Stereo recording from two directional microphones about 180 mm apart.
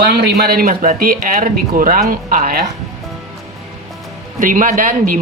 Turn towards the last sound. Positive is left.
turn(degrees=-50)  # may be behind; listen again after turning